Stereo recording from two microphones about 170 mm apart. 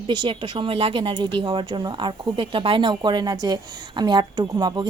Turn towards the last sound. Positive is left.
turn(degrees=-25)  # may be behind; listen again after turning